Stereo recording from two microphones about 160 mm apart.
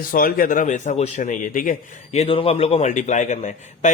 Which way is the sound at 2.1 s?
35° left (ahead or behind).